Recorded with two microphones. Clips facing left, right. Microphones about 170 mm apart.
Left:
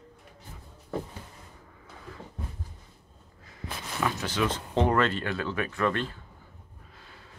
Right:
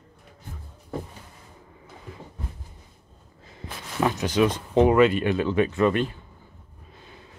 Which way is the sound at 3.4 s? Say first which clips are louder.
Even; 25° right (ahead or behind).